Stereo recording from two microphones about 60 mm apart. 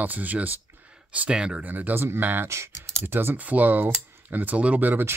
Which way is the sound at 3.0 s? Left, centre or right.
Right.